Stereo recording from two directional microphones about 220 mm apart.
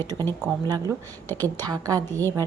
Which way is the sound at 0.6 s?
15° right (ahead or behind).